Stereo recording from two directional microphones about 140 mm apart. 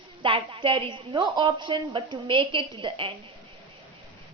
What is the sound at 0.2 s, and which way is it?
A woman's voice, 40° right (ahead or behind).